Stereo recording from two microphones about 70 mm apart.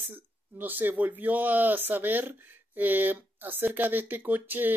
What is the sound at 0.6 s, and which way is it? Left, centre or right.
Speech, right.